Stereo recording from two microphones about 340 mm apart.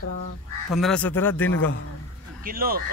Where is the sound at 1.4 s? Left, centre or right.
Left.